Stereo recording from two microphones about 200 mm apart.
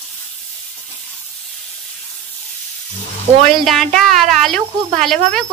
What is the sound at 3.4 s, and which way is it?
Speech, centre (ahead or behind).